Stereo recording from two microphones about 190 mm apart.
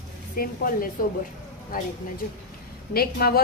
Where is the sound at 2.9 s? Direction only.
55° left (ahead or behind).